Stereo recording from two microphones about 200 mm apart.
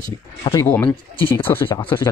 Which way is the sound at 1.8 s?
25° left (ahead or behind).